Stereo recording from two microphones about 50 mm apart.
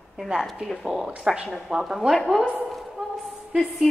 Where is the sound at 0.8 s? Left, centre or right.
Centre.